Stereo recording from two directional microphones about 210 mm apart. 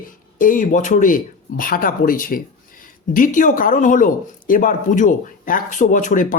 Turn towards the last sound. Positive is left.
turn(degrees=40)  # may be behind; listen again after turning